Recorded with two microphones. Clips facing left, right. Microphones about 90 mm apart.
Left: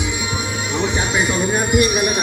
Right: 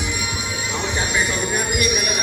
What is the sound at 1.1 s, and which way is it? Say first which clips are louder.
Music: left 4 dB; 30° left (ahead or behind).